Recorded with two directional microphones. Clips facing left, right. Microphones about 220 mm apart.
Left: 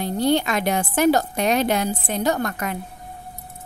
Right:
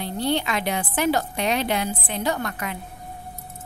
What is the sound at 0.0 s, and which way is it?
A woman's voice, 45° left (ahead or behind).